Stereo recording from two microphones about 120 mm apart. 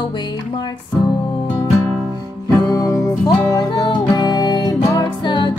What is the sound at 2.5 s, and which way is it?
Music, 30° left (ahead or behind).